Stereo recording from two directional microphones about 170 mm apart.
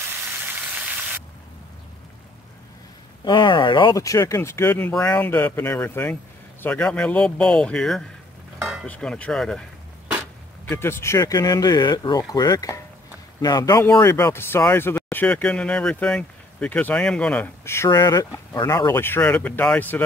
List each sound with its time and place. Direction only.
3.3 s speech: 25° left (ahead or behind); by 8.0 s 5° left (ahead or behind)
8.5 s cutlery: 5° right (ahead or behind)
8.8 s speech: 5° left (ahead or behind)
17.8 s speech: 25° left (ahead or behind)